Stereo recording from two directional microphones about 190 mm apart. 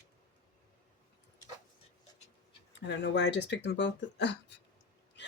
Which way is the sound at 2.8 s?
65° left (ahead or behind).